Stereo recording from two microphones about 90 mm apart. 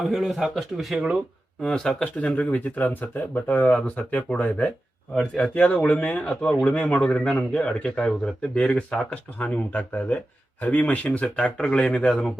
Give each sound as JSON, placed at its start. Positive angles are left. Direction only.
{"t": 0.0, "sound": "speech", "side_deg": 0}
{"t": 2.1, "sound": "speech", "side_deg": 15}